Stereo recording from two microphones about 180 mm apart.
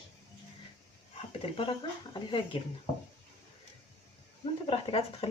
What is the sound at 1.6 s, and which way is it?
Speech, 30° left (ahead or behind).